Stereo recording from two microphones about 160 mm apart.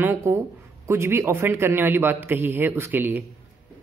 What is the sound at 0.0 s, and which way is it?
Speech, 15° right (ahead or behind).